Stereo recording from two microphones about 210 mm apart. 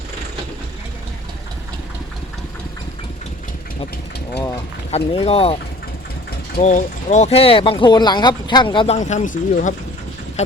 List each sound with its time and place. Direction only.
4.9 s speech: 30° left (ahead or behind)
6.6 s speech: 35° left (ahead or behind)
9.0 s speech: 35° left (ahead or behind)